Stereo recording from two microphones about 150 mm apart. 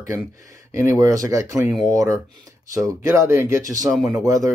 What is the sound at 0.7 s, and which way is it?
Speech, 20° right (ahead or behind).